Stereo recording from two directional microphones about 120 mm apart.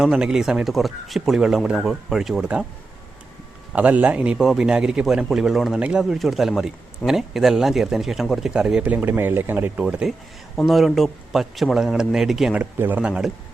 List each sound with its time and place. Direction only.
0.0 s speech: 5° right (ahead or behind)
3.7 s a man's voice: 10° right (ahead or behind)